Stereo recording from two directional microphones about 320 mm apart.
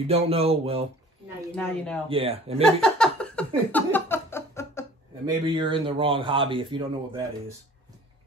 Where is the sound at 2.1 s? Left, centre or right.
Centre.